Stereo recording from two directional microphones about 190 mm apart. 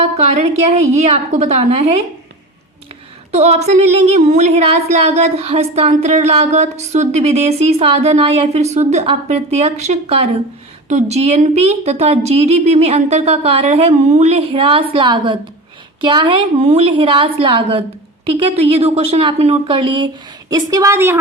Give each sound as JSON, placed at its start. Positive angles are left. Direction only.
{"t": 0.0, "sound": "speech", "side_deg": -35}
{"t": 3.3, "sound": "a woman's voice", "side_deg": -35}